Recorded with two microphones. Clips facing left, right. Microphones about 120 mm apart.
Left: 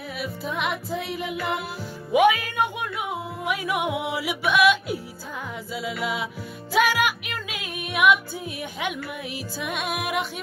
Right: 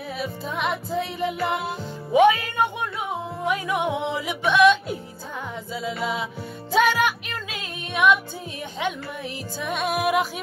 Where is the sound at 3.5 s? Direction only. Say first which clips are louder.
Right 2 dB; 10° left (ahead or behind).